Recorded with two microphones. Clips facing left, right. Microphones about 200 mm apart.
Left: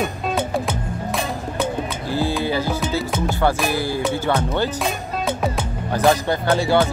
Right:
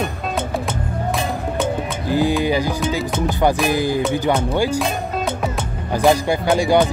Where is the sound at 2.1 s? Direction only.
15° right (ahead or behind).